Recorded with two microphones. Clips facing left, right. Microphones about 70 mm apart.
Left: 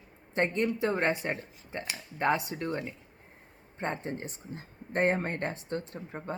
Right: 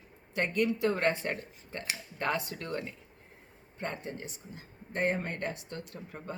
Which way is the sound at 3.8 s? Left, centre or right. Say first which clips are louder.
Left 4 dB; left.